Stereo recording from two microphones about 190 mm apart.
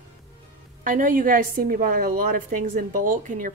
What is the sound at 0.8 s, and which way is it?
A woman's voice, 45° right (ahead or behind).